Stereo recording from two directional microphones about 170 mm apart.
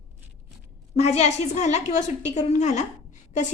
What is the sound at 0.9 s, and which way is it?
A woman's voice, 40° left (ahead or behind).